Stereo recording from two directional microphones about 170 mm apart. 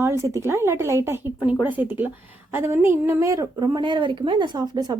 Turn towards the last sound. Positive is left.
turn(degrees=-25)  # may be behind; listen again after turning